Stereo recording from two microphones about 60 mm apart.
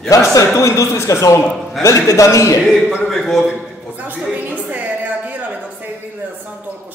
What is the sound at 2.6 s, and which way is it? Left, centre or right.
Speech, centre.